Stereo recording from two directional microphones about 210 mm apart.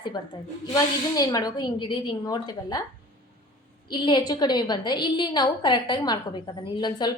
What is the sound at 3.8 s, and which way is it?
A woman's voice, 20° left (ahead or behind).